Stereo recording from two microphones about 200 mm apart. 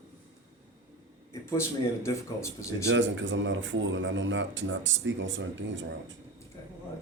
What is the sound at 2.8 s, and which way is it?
Speech, 70° right (ahead or behind).